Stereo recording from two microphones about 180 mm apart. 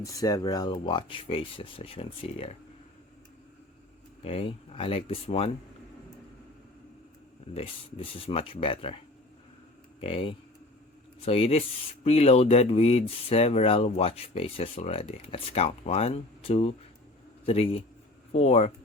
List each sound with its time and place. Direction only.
0.0 s speech: 20° left (ahead or behind)
4.2 s speech: 30° left (ahead or behind)
7.5 s speech: 30° left (ahead or behind)
10.0 s a man's voice: 30° left (ahead or behind)